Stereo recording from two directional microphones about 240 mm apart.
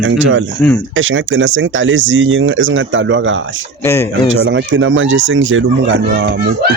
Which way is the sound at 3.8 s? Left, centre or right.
Centre.